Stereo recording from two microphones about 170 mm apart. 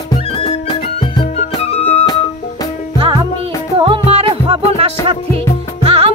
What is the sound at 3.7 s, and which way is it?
Music, 30° right (ahead or behind).